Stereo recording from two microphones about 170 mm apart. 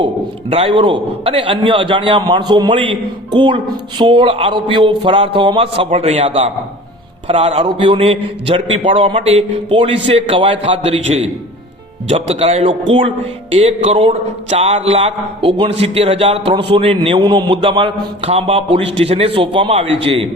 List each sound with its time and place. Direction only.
0.5 s a man's voice: 35° right (ahead or behind)
12.0 s a man's voice: 35° right (ahead or behind)